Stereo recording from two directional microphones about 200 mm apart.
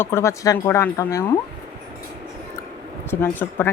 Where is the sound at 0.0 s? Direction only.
15° left (ahead or behind).